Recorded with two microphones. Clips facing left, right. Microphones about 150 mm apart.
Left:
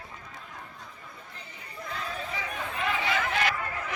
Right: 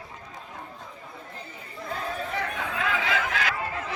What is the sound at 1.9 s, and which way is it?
Chatter, 55° right (ahead or behind).